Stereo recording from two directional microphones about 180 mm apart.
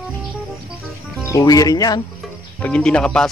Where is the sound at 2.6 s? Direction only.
5° left (ahead or behind).